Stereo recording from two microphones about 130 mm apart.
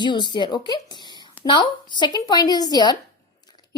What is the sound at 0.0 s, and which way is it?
A woman's voice, 35° left (ahead or behind).